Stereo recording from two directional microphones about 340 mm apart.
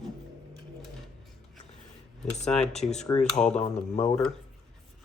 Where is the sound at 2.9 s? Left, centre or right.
Centre.